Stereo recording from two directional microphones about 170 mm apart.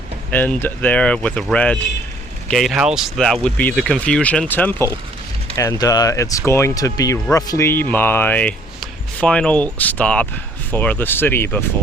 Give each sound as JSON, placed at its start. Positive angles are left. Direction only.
{"t": 0.3, "sound": "speech", "side_deg": 10}